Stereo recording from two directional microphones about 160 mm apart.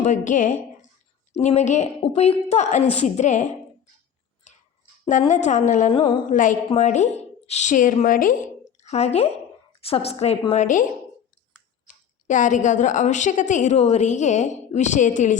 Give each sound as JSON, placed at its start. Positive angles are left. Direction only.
{"t": 0.0, "sound": "a woman's voice", "side_deg": 50}
{"t": 4.5, "sound": "clicking", "side_deg": 45}
{"t": 5.3, "sound": "a woman's voice", "side_deg": 50}
{"t": 5.9, "sound": "a woman's voice", "side_deg": 35}
{"t": 6.3, "sound": "a woman's voice", "side_deg": 55}
{"t": 8.8, "sound": "a woman's voice", "side_deg": 45}
{"t": 11.9, "sound": "a woman's voice", "side_deg": 50}